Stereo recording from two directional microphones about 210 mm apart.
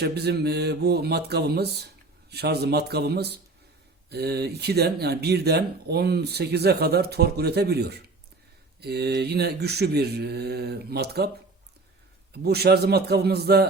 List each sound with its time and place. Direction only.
0.0 s speech: 50° right (ahead or behind)
12.3 s speech: 50° right (ahead or behind)